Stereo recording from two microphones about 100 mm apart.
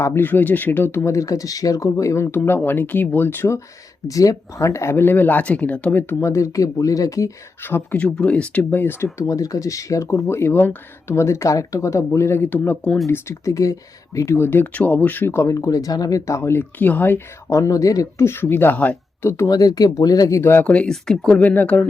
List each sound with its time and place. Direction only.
0.0 s speech: 20° left (ahead or behind)
4.1 s speech: 35° left (ahead or behind)
7.6 s speech: 20° left (ahead or behind)
9.1 s speech: 35° left (ahead or behind)
17.5 s speech: 35° left (ahead or behind); by 19.3 s 15° left (ahead or behind)
19.5 s speech: 40° left (ahead or behind)
20.4 s speech: 20° left (ahead or behind)